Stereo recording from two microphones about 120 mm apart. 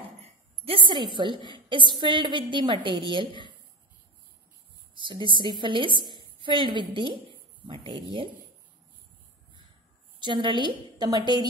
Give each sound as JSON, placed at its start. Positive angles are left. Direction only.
{"t": 0.2, "sound": "a woman's voice", "side_deg": -50}
{"t": 4.9, "sound": "a woman's voice", "side_deg": -40}
{"t": 10.2, "sound": "a woman's voice", "side_deg": -40}